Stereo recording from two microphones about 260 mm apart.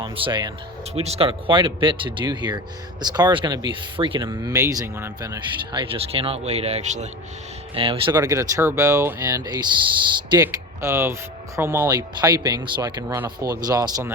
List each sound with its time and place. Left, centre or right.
0.0 s speech: centre